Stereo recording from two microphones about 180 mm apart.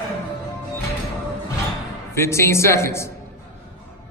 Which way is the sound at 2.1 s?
15° left (ahead or behind).